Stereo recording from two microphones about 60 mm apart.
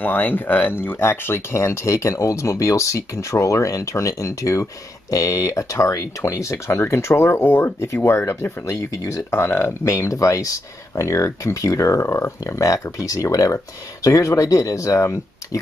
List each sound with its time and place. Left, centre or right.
0.0 s speech: left